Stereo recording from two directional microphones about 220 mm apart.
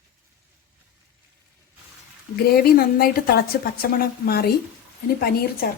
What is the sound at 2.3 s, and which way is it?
Speech, 45° left (ahead or behind).